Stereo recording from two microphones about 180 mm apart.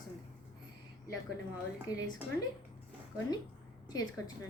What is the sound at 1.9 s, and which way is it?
Speech, 20° left (ahead or behind).